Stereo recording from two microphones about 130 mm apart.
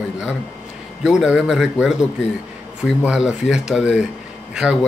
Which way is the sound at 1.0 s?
5° right (ahead or behind).